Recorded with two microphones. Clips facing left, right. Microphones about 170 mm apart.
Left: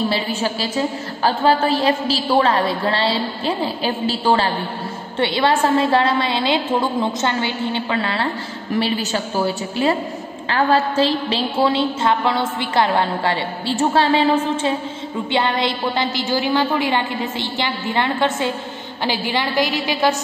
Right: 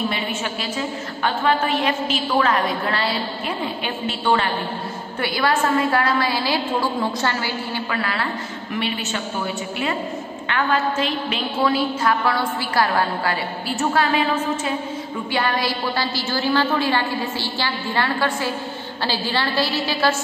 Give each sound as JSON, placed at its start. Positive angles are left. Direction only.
{"t": 0.1, "sound": "a woman's voice", "side_deg": 35}